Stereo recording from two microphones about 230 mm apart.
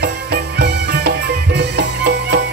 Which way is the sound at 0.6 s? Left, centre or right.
Right.